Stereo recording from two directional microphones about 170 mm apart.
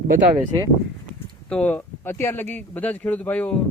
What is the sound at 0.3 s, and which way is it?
Speech, 20° right (ahead or behind).